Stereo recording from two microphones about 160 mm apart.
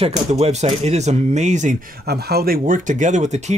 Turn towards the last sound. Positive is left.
turn(degrees=-45)  # may be behind; listen again after turning